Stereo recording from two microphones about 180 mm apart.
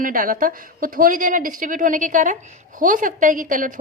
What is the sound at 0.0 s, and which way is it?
Speech, 50° right (ahead or behind).